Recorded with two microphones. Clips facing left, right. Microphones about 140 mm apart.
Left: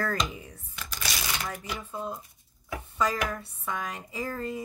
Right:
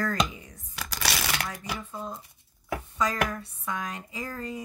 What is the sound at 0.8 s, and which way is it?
Shuffling cards, 75° right (ahead or behind).